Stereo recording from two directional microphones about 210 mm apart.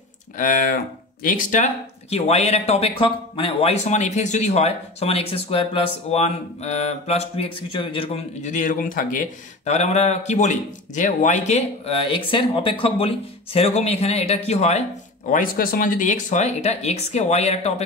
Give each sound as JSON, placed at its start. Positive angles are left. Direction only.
{"t": 0.4, "sound": "speech", "side_deg": 40}